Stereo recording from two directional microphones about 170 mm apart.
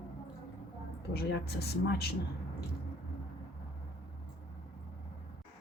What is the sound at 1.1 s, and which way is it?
Speech, 70° left (ahead or behind).